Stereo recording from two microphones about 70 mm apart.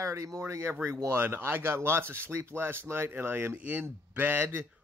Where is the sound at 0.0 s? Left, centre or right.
Right.